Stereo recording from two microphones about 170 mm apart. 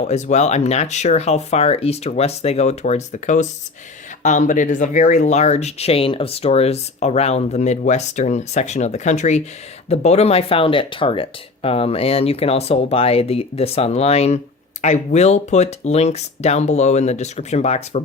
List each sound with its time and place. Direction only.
0.0 s speech: 45° left (ahead or behind)